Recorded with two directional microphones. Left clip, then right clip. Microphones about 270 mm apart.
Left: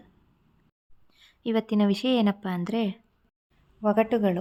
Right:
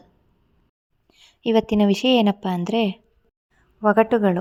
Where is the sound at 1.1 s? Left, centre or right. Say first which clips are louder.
Right 8 dB; centre.